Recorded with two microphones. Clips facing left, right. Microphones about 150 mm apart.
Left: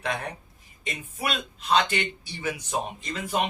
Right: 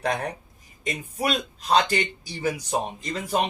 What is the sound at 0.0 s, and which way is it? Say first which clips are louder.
Speech: right 4 dB; 40° right (ahead or behind).